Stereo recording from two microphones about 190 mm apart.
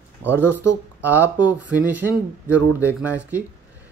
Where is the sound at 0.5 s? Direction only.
10° right (ahead or behind).